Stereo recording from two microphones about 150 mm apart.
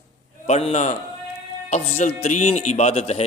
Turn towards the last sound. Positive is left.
turn(degrees=40)  # may be behind; listen again after turning